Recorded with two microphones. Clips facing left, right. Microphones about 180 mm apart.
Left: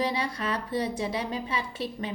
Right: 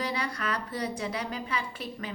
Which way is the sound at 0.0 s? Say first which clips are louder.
Left 3 dB; 25° left (ahead or behind).